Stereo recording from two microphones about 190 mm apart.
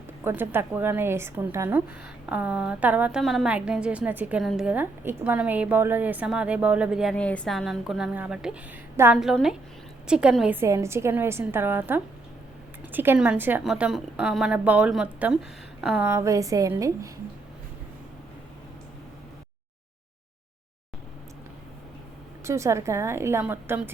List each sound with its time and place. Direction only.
0.3 s a woman's voice: 10° right (ahead or behind)
22.4 s a woman's voice: 15° right (ahead or behind)